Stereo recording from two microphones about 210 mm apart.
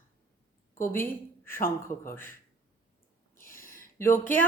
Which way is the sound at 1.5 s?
40° left (ahead or behind).